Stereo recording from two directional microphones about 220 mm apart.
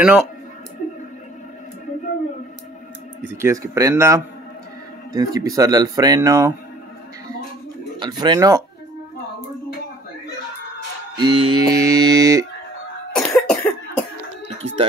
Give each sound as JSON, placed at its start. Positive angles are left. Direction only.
{"t": 0.0, "sound": "speech", "side_deg": -5}
{"t": 3.2, "sound": "speech", "side_deg": -10}
{"t": 8.0, "sound": "speech", "side_deg": -20}
{"t": 11.1, "sound": "speech", "side_deg": -20}
{"t": 13.1, "sound": "cough", "side_deg": 0}